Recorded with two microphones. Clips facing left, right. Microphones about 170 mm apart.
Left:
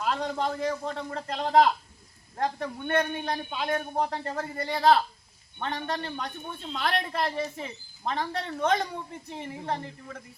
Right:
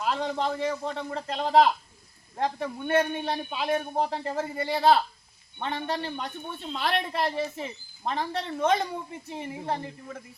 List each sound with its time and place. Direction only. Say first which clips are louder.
0.0 s a man's voice: right 1 dB; 5° right (ahead or behind)